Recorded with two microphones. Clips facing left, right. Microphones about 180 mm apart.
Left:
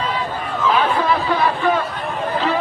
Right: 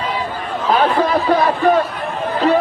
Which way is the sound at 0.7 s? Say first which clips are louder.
Right 4 dB; 40° right (ahead or behind).